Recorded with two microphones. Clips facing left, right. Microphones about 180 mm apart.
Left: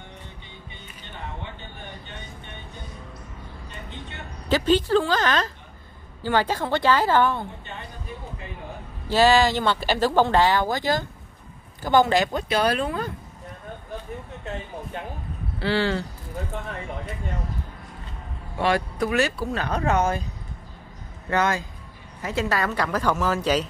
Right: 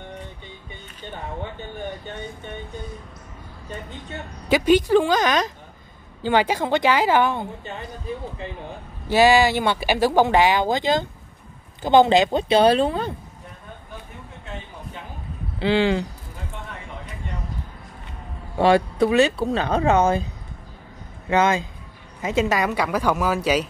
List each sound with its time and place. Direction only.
4.5 s speech: 15° right (ahead or behind)
9.1 s speech: 15° right (ahead or behind)
15.6 s speech: 20° right (ahead or behind)
18.6 s speech: 30° right (ahead or behind)
21.3 s speech: 20° right (ahead or behind)